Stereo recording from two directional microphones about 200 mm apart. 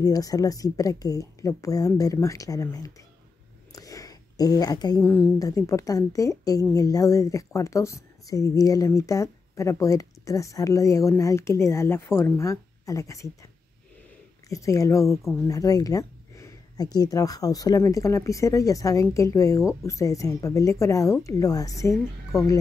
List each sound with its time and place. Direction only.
0.0 s a woman's voice: 20° left (ahead or behind)
14.5 s a woman's voice: 15° left (ahead or behind)